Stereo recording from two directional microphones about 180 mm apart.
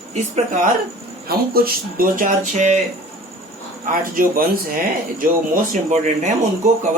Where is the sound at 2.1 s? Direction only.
45° right (ahead or behind).